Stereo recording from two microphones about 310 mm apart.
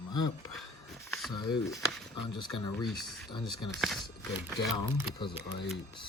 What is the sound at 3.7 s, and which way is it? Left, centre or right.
Speech, centre.